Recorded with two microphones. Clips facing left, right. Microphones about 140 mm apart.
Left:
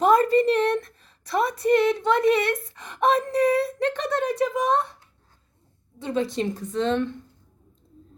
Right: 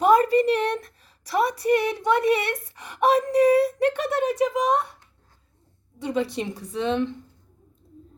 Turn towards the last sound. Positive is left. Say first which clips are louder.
# left 1 dB
turn(degrees=-15)  # may be behind; listen again after turning